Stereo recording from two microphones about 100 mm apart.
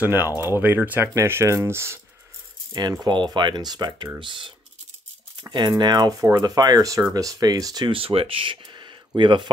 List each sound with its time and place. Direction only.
0.0 s speech: 20° right (ahead or behind)
2.7 s speech: 40° right (ahead or behind)
7.9 s speech: 70° right (ahead or behind); by 9.5 s 50° right (ahead or behind)